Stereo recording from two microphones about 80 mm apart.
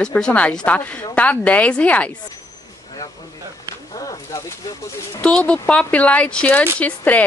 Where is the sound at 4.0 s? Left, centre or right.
Left.